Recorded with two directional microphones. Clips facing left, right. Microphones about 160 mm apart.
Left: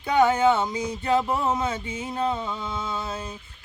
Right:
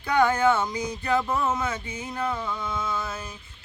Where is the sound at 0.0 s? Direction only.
20° left (ahead or behind).